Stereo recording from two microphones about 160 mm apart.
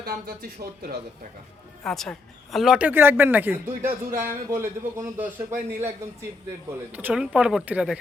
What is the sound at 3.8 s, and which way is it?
Speech, 60° right (ahead or behind).